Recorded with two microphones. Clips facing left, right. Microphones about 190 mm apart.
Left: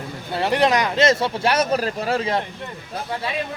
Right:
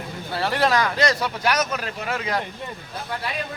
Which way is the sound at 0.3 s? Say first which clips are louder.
Left 3 dB; 20° left (ahead or behind).